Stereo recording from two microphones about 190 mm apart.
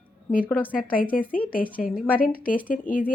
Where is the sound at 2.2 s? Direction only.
45° left (ahead or behind).